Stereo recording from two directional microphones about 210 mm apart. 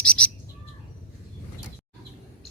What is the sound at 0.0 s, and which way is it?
Bird, 5° left (ahead or behind).